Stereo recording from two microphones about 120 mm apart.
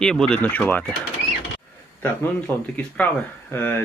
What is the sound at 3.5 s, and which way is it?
Speech, 15° left (ahead or behind).